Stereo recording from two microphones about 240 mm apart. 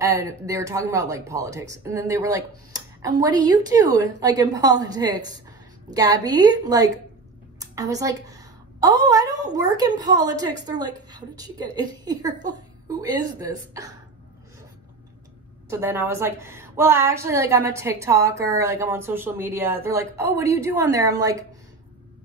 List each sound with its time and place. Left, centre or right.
0.0 s a woman's voice: centre
15.7 s a woman's voice: centre